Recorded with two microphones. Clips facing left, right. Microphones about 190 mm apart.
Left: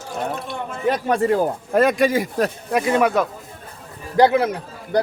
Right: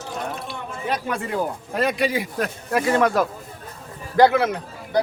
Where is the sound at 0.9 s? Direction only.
40° left (ahead or behind).